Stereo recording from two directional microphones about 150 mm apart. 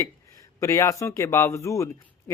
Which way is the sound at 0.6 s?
20° left (ahead or behind).